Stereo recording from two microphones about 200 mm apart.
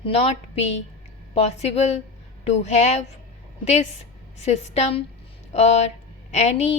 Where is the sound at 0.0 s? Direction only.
30° left (ahead or behind).